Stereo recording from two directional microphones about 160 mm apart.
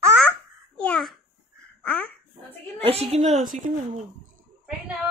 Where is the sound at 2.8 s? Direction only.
40° right (ahead or behind).